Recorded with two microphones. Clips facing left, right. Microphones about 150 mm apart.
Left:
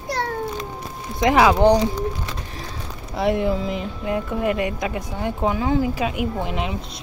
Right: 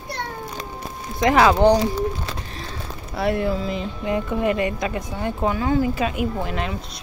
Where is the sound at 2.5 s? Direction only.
15° left (ahead or behind).